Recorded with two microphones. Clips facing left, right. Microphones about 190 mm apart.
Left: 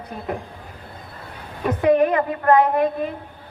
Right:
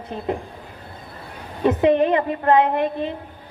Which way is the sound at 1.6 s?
25° right (ahead or behind).